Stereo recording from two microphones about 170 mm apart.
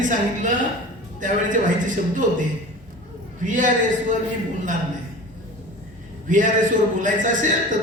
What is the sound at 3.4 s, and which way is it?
Speech, 50° right (ahead or behind).